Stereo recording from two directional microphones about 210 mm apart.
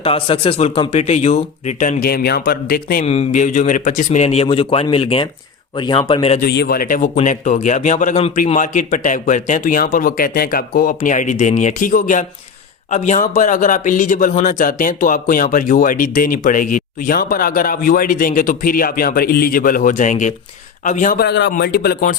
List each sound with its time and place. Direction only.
0.0 s speech: 25° left (ahead or behind); by 3.1 s 45° left (ahead or behind)
3.1 s speech: 35° left (ahead or behind)
6.4 s speech: 50° left (ahead or behind)